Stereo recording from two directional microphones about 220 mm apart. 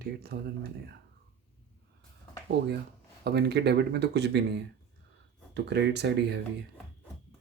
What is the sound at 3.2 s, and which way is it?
Speech, 45° right (ahead or behind).